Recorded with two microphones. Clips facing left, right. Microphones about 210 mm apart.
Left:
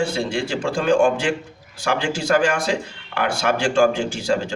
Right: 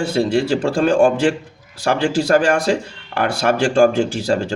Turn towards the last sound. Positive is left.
turn(degrees=-40)  # may be behind; listen again after turning